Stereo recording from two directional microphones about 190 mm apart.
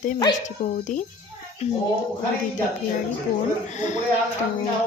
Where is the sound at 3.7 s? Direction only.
40° left (ahead or behind).